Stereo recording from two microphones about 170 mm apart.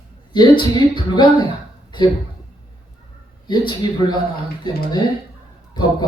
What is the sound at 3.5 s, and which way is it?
Speech, 25° left (ahead or behind).